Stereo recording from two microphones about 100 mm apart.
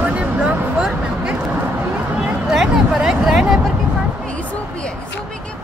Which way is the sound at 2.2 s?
5° right (ahead or behind).